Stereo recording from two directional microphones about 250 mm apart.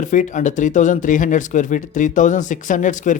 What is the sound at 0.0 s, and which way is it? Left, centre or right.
A man's voice, left.